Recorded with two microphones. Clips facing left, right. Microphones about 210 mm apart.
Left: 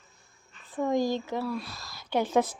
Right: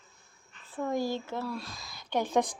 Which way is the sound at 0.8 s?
15° left (ahead or behind).